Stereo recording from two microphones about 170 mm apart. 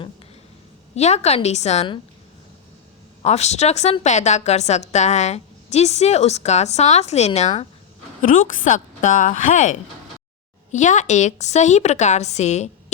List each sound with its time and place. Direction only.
0.9 s a woman's voice: 40° left (ahead or behind)
3.2 s a woman's voice: 40° left (ahead or behind)
8.2 s a woman's voice: 50° left (ahead or behind)